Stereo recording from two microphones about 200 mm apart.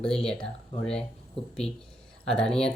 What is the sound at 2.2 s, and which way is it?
Speech, 5° left (ahead or behind).